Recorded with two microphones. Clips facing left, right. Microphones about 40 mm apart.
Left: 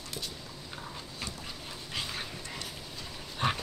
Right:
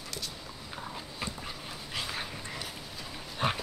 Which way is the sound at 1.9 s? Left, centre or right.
Centre.